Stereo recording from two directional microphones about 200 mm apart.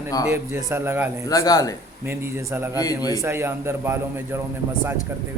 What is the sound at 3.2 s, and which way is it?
A man's voice, 10° right (ahead or behind).